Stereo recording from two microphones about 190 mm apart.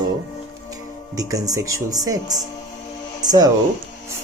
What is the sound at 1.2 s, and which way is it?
Speech, 20° right (ahead or behind).